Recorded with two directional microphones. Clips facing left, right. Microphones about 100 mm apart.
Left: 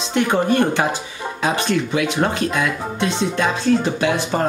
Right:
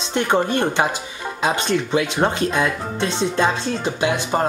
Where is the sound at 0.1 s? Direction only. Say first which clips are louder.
Left 1 dB; 25° right (ahead or behind).